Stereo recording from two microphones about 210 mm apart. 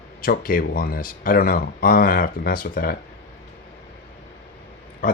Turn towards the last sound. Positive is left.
turn(degrees=40)  # may be behind; listen again after turning